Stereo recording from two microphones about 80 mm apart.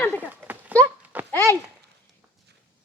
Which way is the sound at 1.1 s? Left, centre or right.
Centre.